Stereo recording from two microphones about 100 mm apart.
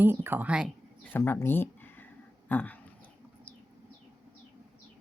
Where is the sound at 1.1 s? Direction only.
25° left (ahead or behind).